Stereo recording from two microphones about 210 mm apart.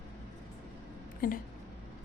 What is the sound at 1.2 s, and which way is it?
Speech, 40° left (ahead or behind).